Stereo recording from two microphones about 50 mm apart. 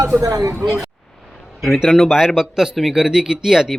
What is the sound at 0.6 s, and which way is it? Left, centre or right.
A man's voice, centre.